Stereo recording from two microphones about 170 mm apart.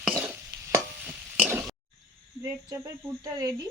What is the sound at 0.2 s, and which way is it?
Stir, 15° right (ahead or behind).